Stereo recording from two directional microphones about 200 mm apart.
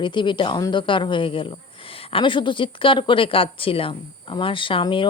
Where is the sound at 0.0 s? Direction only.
25° left (ahead or behind).